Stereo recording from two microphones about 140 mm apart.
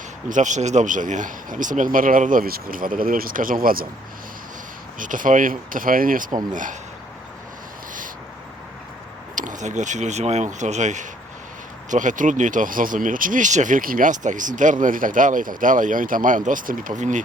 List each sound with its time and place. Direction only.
0.3 s speech: 65° right (ahead or behind); by 3.8 s 90° right
4.9 s speech: 70° right (ahead or behind); by 6.2 s 90° right
6.5 s speech: 70° right (ahead or behind)
9.3 s speech: 65° right (ahead or behind)
17.0 s speech: 65° right (ahead or behind)